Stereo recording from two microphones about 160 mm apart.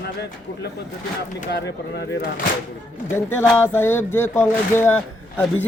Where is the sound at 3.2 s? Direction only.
15° left (ahead or behind).